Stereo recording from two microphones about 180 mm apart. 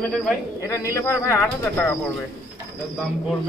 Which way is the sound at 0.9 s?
15° left (ahead or behind).